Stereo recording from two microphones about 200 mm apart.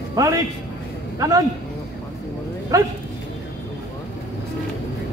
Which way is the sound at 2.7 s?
15° right (ahead or behind).